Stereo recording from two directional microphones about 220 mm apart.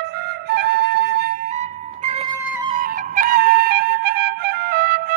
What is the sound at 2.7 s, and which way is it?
Music, 40° right (ahead or behind).